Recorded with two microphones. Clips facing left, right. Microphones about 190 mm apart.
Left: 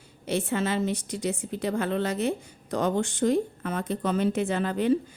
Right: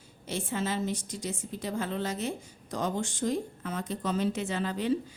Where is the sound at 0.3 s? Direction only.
65° left (ahead or behind).